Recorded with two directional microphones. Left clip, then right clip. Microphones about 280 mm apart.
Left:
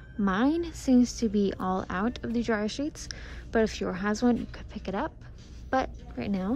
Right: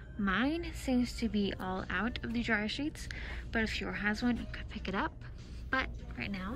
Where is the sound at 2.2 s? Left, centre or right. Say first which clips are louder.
Left 7 dB; right.